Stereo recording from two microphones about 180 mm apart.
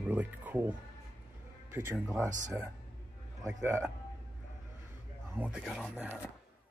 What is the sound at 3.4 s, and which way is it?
Speech, 15° right (ahead or behind).